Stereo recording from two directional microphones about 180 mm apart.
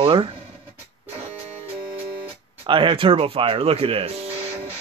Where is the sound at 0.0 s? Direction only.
30° right (ahead or behind).